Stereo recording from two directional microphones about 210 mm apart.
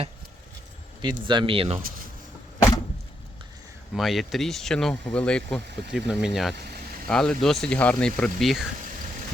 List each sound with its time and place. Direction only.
1.0 s speech: 20° right (ahead or behind)
3.9 s speech: centre (ahead or behind)